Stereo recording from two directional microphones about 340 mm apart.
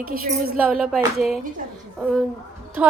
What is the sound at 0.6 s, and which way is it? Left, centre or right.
Speech, centre.